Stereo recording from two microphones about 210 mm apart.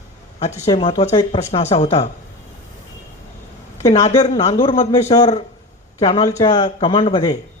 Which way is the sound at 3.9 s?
30° left (ahead or behind).